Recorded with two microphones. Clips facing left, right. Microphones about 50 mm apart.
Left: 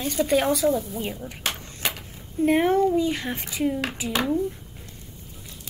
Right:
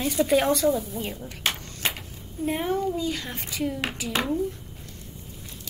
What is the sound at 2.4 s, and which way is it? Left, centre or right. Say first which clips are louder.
Speech: left 7 dB; left.